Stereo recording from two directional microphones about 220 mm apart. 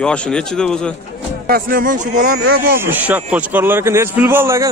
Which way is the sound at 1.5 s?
40° right (ahead or behind).